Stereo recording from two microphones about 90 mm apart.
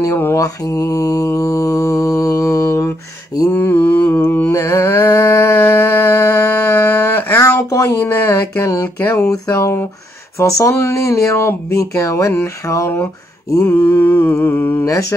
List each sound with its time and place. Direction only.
0.0 s mantra: 30° left (ahead or behind)
3.5 s mantra: 20° left (ahead or behind)
4.6 s mantra: 40° left (ahead or behind)
7.5 s a sound: 35° left (ahead or behind)
9.5 s speech: 30° left (ahead or behind)
13.7 s mantra: 20° left (ahead or behind)
14.9 s speech: 40° left (ahead or behind)